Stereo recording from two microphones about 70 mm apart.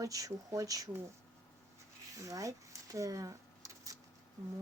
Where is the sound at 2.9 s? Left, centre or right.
Right.